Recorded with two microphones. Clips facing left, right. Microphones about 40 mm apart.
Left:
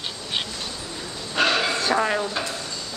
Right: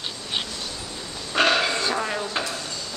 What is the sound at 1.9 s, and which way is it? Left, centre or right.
Speech, centre.